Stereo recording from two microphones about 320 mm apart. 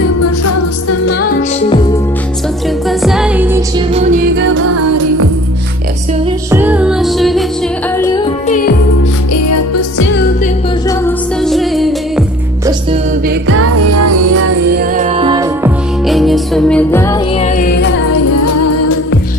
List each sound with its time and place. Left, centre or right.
0.2 s music: left
2.9 s music: centre
3.9 s music: right
4.5 s music: right
6.5 s music: centre
8.0 s music: centre
9.3 s music: left
10.9 s music: centre
13.3 s music: right
14.8 s music: right
16.1 s music: centre
17.4 s music: left
18.0 s music: left